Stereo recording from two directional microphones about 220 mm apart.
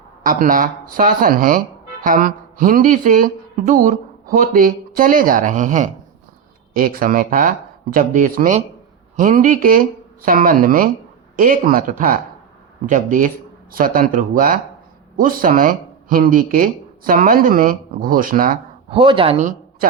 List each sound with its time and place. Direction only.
0.2 s speech: 40° right (ahead or behind)
18.9 s speech: 25° right (ahead or behind)